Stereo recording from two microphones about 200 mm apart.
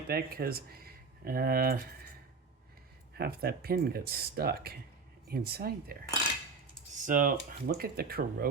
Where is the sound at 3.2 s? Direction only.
50° right (ahead or behind).